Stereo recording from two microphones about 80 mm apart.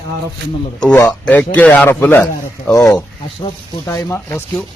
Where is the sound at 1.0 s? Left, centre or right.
Centre.